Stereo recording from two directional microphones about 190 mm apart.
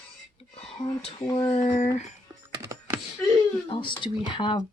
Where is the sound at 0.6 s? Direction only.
30° left (ahead or behind).